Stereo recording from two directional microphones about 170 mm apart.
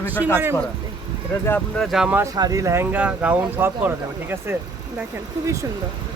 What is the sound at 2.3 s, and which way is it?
Speech, 20° right (ahead or behind).